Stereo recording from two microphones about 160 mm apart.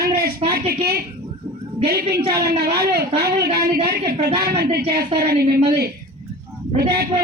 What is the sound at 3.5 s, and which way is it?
Speech, 35° right (ahead or behind).